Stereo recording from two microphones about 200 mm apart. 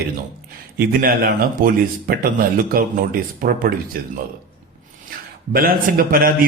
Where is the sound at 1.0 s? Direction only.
45° right (ahead or behind).